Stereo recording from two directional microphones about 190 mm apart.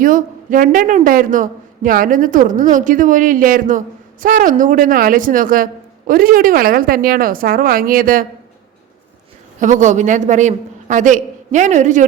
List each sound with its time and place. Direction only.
0.0 s a woman's voice: 45° right (ahead or behind)
9.6 s a man's voice: 40° right (ahead or behind)